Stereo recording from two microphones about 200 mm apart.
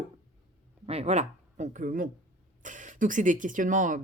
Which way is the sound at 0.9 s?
30° right (ahead or behind).